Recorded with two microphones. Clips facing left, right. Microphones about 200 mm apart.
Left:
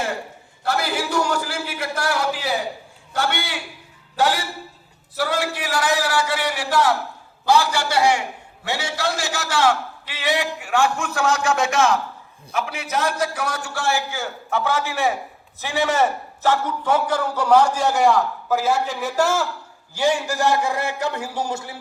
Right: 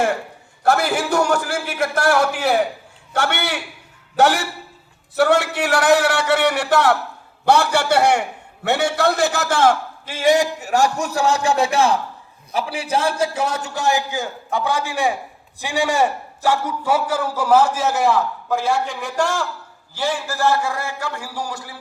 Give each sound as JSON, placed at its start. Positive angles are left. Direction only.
{"t": 0.6, "sound": "a man's voice", "side_deg": -50}